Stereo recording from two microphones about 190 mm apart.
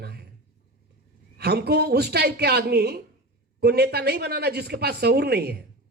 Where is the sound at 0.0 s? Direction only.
55° right (ahead or behind).